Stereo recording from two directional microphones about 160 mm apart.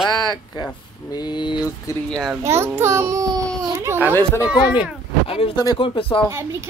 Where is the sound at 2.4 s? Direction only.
15° right (ahead or behind).